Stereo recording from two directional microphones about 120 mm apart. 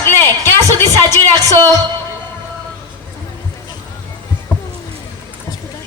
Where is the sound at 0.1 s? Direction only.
20° left (ahead or behind).